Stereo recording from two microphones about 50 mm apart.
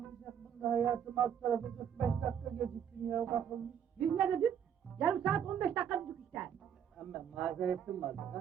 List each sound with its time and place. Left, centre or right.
0.8 s a man's voice: centre
4.2 s speech: centre
6.1 s a woman's voice: centre